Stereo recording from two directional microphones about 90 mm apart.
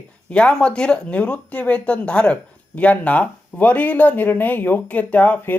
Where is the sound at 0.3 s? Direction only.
10° left (ahead or behind).